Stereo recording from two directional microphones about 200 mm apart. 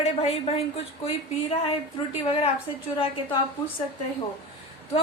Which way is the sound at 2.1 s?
30° left (ahead or behind).